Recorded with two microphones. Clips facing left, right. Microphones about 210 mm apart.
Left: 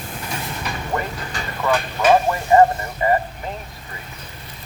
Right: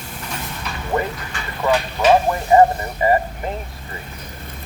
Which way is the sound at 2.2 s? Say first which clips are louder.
Right 1 dB; 15° right (ahead or behind).